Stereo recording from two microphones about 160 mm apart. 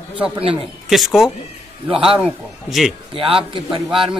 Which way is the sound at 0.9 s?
Centre (ahead or behind).